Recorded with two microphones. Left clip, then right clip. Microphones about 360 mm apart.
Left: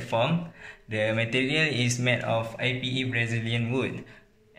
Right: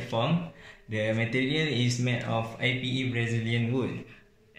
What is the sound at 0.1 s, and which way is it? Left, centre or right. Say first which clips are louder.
Speech: left 3 dB; left.